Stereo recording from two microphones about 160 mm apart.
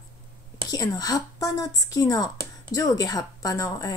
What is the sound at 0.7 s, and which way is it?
A woman's voice, 25° left (ahead or behind).